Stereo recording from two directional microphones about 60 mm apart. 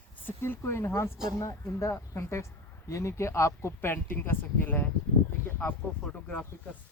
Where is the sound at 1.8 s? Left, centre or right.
Left.